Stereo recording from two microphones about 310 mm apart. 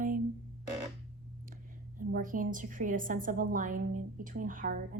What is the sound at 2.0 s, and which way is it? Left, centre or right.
A woman's voice, right.